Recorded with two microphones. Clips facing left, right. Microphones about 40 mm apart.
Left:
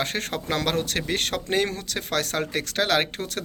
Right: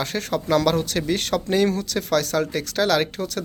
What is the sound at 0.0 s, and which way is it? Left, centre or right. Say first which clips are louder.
Speech: right 3 dB; left.